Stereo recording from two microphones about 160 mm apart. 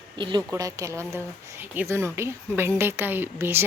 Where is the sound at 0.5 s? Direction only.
20° right (ahead or behind).